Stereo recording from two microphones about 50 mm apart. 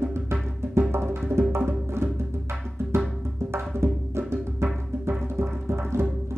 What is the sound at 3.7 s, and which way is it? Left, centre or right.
Music, right.